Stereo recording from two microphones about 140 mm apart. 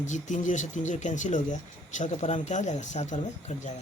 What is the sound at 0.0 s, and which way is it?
Speech, 60° left (ahead or behind).